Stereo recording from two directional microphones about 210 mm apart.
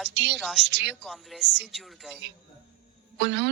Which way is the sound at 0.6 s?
55° right (ahead or behind).